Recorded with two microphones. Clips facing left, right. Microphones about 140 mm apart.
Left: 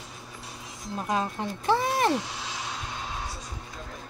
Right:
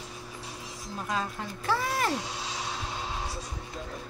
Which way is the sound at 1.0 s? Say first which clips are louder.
Left 4 dB; 20° left (ahead or behind).